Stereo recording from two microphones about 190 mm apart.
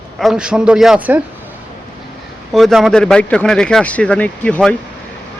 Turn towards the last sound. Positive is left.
turn(degrees=5)  # may be behind; listen again after turning